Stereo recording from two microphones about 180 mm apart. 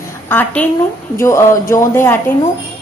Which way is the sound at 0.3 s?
10° left (ahead or behind).